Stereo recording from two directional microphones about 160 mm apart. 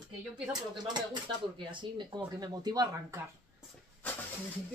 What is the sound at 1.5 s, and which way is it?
Speech, 30° right (ahead or behind).